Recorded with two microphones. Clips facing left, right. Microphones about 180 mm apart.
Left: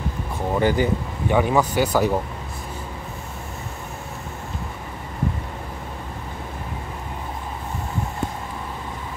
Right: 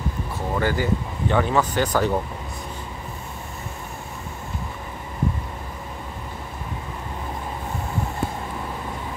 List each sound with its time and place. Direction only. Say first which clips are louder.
0.6 s speech: left 3 dB; 20° left (ahead or behind)